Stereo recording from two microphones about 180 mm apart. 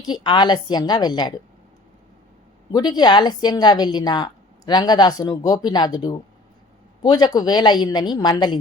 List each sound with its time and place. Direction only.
0.0 s a woman's voice: 25° left (ahead or behind)
2.7 s a woman's voice: 25° left (ahead or behind)